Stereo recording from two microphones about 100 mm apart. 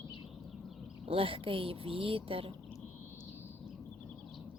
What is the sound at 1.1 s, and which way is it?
Speech, 65° right (ahead or behind).